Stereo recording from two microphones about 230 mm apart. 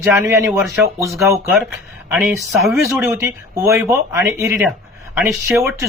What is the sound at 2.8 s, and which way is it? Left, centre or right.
Speech, centre.